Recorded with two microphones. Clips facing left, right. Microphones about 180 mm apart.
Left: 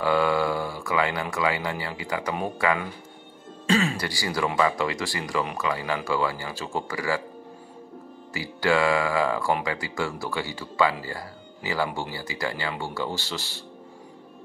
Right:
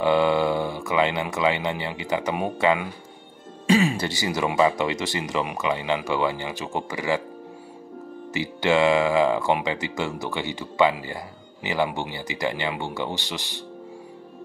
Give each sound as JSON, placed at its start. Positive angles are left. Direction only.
{"t": 0.0, "sound": "speech", "side_deg": -20}
{"t": 3.6, "sound": "speech", "side_deg": -15}
{"t": 8.3, "sound": "speech", "side_deg": -20}